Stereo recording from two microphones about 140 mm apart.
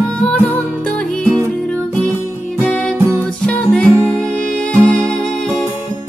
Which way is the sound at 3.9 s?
20° right (ahead or behind).